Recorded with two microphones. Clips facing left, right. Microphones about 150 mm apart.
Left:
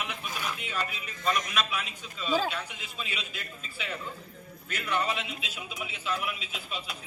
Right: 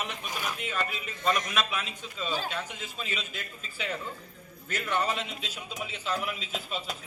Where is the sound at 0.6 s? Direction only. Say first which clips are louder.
Right 2 dB; 45° right (ahead or behind).